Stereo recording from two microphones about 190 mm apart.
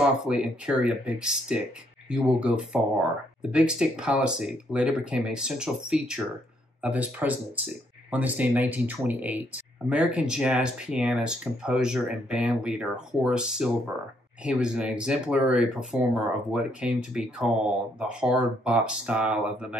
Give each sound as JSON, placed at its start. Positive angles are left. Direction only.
{"t": 0.0, "sound": "speech", "side_deg": -5}